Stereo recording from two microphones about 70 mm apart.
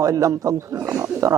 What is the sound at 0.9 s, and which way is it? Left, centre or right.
Speech, right.